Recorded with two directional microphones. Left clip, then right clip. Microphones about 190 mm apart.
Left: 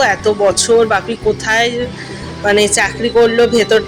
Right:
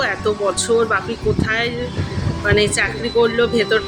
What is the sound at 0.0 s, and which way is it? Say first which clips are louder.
Speech: left 7 dB; 10° left (ahead or behind).